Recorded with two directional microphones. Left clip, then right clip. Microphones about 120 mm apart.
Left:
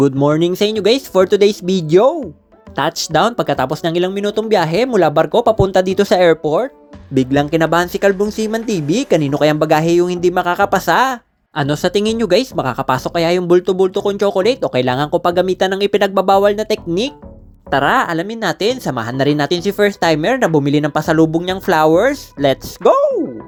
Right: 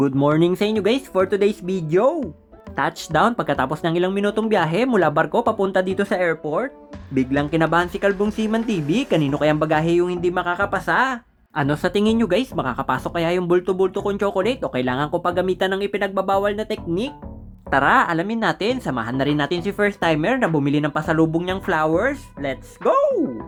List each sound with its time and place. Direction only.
0.0 s speech: 20° left (ahead or behind)
1.1 s speech: 35° left (ahead or behind)
2.7 s speech: 25° left (ahead or behind)
11.0 s speech: 20° left (ahead or behind)
15.8 s speech: 45° left (ahead or behind)
17.7 s speech: 20° left (ahead or behind)
18.9 s speech: 30° left (ahead or behind)
22.8 s speech: centre (ahead or behind)